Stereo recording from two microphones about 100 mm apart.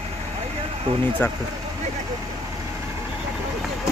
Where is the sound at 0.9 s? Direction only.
60° right (ahead or behind).